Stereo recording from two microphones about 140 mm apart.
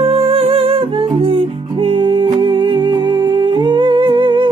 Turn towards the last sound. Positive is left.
turn(degrees=-35)  # may be behind; listen again after turning